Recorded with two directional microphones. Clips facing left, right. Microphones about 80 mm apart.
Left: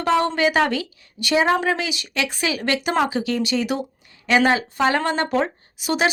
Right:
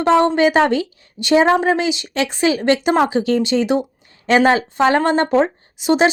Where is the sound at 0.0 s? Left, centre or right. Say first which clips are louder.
Right 5 dB; right.